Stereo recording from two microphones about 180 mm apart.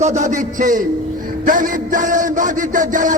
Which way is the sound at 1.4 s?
50° right (ahead or behind).